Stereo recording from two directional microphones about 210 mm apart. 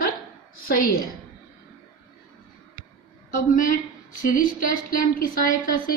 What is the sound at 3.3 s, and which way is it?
A woman's voice, 40° left (ahead or behind).